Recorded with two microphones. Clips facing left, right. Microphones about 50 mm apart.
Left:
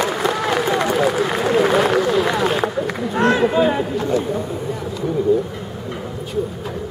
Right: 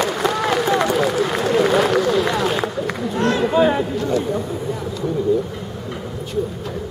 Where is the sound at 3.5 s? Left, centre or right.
Centre.